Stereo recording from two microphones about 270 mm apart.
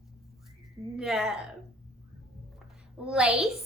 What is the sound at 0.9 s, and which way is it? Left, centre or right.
Speech, centre.